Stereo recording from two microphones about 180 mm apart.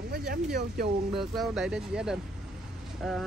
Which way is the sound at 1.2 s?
Centre (ahead or behind).